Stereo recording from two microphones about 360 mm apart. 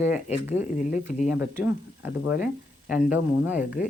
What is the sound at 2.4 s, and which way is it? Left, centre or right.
Speech, centre.